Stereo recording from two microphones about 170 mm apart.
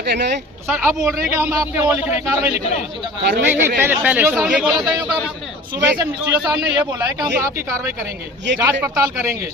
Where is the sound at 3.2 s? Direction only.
75° right (ahead or behind).